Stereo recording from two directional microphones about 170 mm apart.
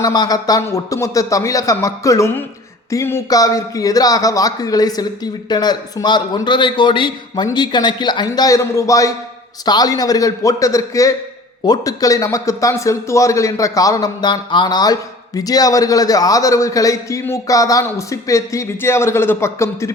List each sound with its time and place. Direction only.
0.0 s a man's voice: 25° left (ahead or behind)